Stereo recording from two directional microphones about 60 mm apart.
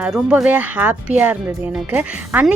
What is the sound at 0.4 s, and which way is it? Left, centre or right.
Speech, right.